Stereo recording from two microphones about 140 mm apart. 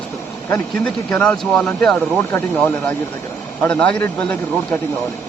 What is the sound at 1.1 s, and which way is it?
Speech, 10° left (ahead or behind).